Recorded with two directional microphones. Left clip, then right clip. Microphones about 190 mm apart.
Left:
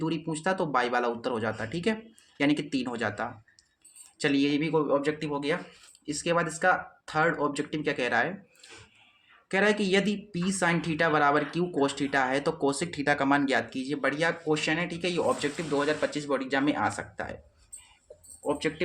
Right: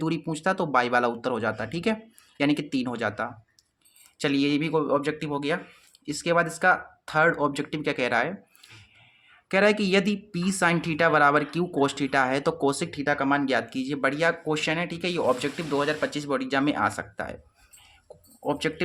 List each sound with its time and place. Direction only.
0.0 s speech: 35° right (ahead or behind)